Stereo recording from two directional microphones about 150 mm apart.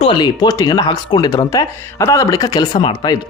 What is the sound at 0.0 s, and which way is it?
Speech, 30° left (ahead or behind).